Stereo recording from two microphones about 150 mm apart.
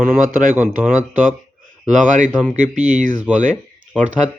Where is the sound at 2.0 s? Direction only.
55° right (ahead or behind).